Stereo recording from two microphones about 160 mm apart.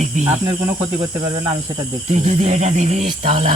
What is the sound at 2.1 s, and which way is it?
Speech, 45° right (ahead or behind).